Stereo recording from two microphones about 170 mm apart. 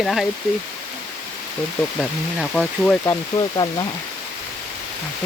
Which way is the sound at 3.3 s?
35° left (ahead or behind).